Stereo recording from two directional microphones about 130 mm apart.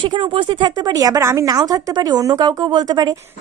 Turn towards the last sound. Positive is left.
turn(degrees=-30)  # may be behind; listen again after turning